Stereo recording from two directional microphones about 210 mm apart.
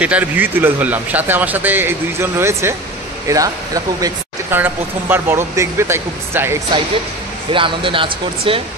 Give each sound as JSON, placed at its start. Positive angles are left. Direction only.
{"t": 0.0, "sound": "speech", "side_deg": -5}
{"t": 7.5, "sound": "speech", "side_deg": -25}